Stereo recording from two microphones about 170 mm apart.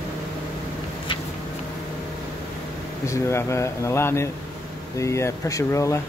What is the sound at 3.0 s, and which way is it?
Speech, 15° left (ahead or behind).